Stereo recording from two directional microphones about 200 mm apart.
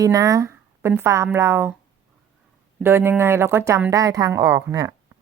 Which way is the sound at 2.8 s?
10° right (ahead or behind).